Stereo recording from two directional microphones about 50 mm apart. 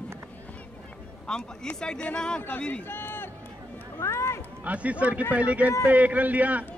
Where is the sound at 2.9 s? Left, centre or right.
Left.